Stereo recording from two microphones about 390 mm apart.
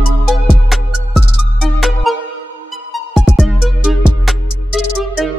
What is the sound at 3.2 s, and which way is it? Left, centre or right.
Music, centre.